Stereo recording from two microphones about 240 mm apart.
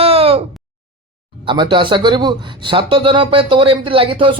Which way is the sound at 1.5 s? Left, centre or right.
Centre.